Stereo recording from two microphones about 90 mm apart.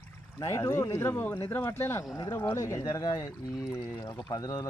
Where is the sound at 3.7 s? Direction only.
40° left (ahead or behind).